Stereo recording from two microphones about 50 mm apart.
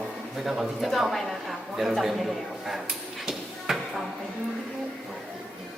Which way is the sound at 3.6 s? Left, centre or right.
Centre.